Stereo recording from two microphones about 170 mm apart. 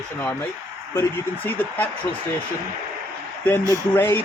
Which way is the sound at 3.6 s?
20° right (ahead or behind).